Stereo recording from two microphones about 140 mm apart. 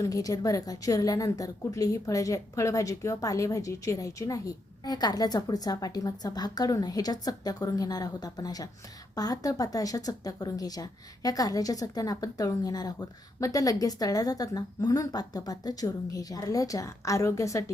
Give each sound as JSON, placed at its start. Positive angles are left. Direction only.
{"t": 0.0, "sound": "a woman's voice", "side_deg": 25}